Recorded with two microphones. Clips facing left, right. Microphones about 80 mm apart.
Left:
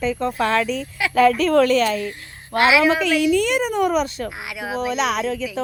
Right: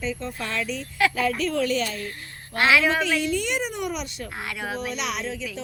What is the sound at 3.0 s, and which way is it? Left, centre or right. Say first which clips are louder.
A woman's voice: left 7 dB; left.